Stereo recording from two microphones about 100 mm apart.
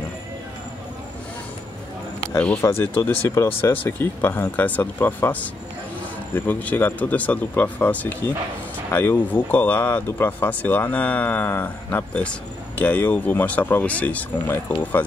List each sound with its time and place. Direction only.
2.3 s speech: 20° left (ahead or behind)